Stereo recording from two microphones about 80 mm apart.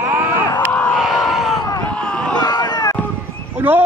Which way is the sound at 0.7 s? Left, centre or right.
Left.